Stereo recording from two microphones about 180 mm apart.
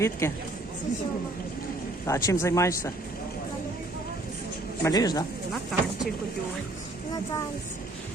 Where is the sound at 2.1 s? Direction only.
15° left (ahead or behind).